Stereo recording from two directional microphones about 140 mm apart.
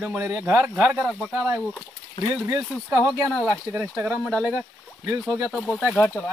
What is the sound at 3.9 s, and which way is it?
Speech, 10° right (ahead or behind).